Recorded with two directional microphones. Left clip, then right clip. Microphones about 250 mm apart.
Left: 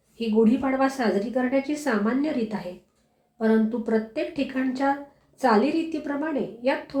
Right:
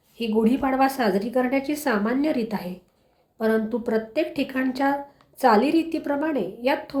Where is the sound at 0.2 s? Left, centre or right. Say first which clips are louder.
Even; right.